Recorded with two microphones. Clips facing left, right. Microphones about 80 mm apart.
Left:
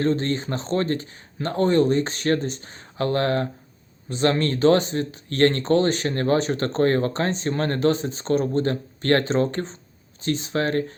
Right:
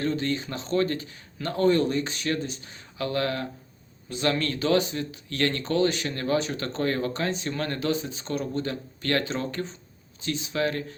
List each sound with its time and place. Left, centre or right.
0.0 s speech: left